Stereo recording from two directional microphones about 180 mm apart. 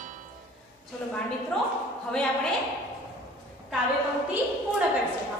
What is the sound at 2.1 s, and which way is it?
Speech, 5° left (ahead or behind).